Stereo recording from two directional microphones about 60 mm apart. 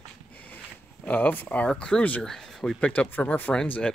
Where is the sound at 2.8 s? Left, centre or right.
Left.